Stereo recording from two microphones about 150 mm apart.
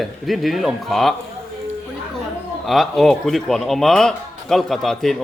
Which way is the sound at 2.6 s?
Centre (ahead or behind).